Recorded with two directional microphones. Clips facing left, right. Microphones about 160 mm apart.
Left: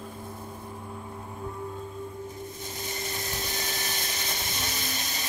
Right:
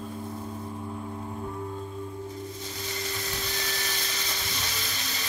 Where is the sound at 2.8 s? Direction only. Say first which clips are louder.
Even; 50° left (ahead or behind).